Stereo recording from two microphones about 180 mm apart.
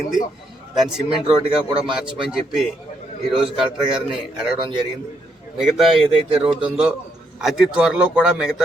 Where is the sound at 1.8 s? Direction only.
5° right (ahead or behind).